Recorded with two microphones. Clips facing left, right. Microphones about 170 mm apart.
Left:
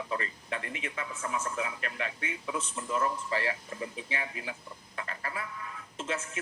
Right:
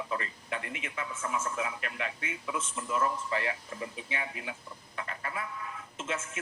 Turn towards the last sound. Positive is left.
turn(degrees=35)  # may be behind; listen again after turning